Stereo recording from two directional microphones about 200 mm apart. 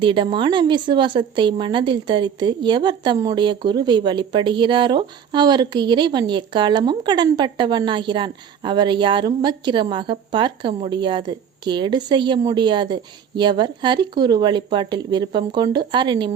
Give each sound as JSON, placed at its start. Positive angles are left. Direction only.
{"t": 0.0, "sound": "a woman's voice", "side_deg": -25}